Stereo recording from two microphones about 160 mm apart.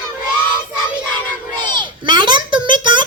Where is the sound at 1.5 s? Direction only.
30° right (ahead or behind).